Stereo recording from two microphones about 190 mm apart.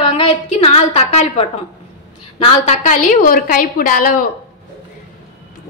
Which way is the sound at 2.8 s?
45° left (ahead or behind).